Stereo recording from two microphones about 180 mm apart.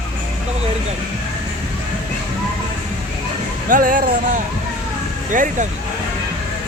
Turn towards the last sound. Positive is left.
turn(degrees=-45)  # may be behind; listen again after turning